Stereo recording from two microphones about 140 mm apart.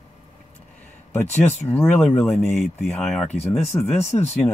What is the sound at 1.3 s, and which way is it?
Speech, 55° left (ahead or behind).